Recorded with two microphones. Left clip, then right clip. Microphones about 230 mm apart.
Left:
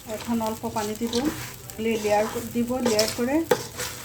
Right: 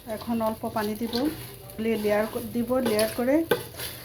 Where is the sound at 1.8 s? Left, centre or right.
Centre.